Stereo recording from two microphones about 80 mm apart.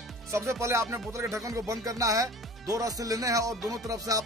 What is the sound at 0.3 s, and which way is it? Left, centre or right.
Speech, right.